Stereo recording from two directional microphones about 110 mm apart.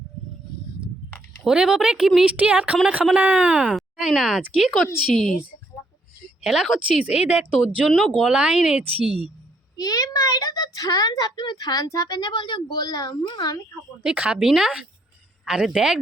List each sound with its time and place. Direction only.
1.5 s a woman's voice: 5° right (ahead or behind)
3.8 s speech: centre (ahead or behind)
6.2 s a woman's voice: 5° right (ahead or behind)
9.7 s a woman's voice: 35° left (ahead or behind)
14.0 s a woman's voice: 10° right (ahead or behind)